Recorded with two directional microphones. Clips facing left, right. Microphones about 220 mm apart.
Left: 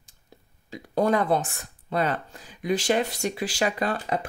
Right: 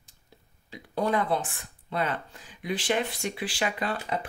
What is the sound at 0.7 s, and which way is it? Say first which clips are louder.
Speech: left 4 dB; 45° left (ahead or behind).